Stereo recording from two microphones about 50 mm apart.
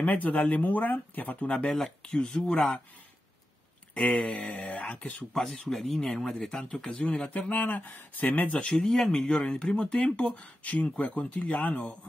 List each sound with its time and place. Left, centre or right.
0.0 s speech: left
4.2 s speech: centre
4.7 s speech: left
5.3 s speech: centre
7.2 s speech: left
8.6 s speech: centre
10.6 s speech: left